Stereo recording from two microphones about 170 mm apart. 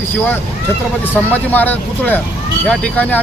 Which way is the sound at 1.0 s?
10° left (ahead or behind).